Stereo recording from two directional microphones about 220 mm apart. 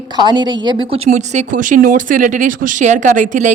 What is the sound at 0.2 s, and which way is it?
A woman's voice, 20° right (ahead or behind).